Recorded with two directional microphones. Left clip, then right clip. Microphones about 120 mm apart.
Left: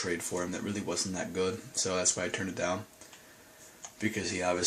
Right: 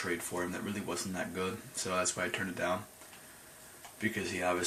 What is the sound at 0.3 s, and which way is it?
Speech, 30° left (ahead or behind).